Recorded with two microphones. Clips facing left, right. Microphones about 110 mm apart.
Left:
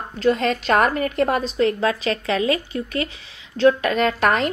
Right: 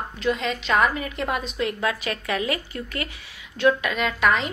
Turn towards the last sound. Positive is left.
turn(degrees=50)  # may be behind; listen again after turning